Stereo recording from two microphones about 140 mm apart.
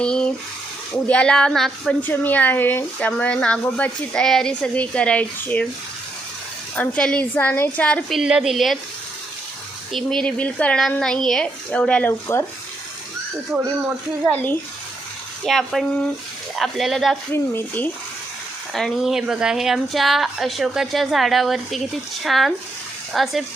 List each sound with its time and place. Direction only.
0.0 s a sound: 5° left (ahead or behind)
1.0 s a woman's voice: 10° left (ahead or behind)
6.7 s a woman's voice: 10° left (ahead or behind)
8.2 s speech: 5° right (ahead or behind)
9.9 s a woman's voice: 5° left (ahead or behind)
14.3 s a woman's voice: 15° left (ahead or behind)
15.4 s speech: centre (ahead or behind)
17.3 s a woman's voice: 15° left (ahead or behind)
18.7 s speech: centre (ahead or behind)